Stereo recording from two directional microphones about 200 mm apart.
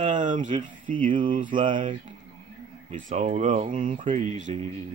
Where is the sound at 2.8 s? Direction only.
35° right (ahead or behind).